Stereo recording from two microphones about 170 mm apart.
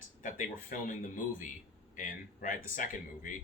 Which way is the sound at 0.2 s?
50° left (ahead or behind).